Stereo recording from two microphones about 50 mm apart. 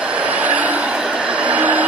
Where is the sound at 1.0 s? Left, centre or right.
Right.